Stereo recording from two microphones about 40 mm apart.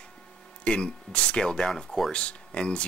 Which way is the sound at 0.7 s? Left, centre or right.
Left.